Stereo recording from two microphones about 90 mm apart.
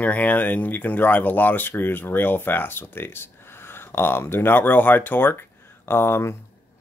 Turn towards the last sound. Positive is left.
turn(degrees=30)  # may be behind; listen again after turning